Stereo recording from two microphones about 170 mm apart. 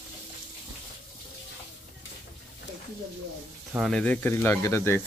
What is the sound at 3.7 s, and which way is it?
Speech, centre (ahead or behind).